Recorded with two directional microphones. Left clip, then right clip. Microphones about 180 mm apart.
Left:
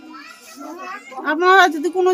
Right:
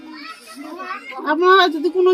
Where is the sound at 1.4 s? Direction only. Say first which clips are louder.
Left 1 dB; 35° left (ahead or behind).